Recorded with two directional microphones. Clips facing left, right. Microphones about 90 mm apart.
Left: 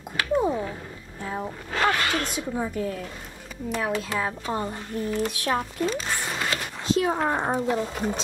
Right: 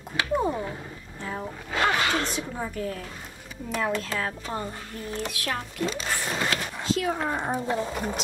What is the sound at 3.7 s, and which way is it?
Speech, 10° left (ahead or behind).